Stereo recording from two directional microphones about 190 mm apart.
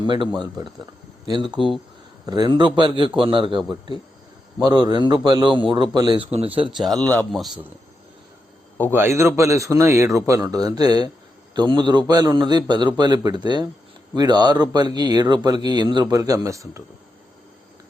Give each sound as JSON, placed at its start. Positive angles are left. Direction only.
{"t": 1.3, "sound": "speech", "side_deg": -20}
{"t": 4.6, "sound": "speech", "side_deg": -20}
{"t": 7.0, "sound": "a man's voice", "side_deg": 5}
{"t": 8.9, "sound": "a man's voice", "side_deg": -10}